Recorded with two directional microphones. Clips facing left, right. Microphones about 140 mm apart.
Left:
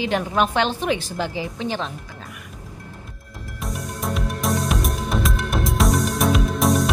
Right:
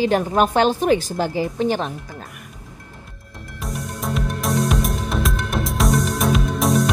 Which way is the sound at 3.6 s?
Centre (ahead or behind).